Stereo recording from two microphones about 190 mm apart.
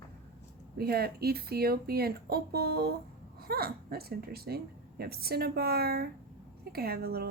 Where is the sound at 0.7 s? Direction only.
55° right (ahead or behind).